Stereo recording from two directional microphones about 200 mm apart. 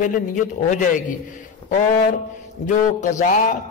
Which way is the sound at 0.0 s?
40° left (ahead or behind).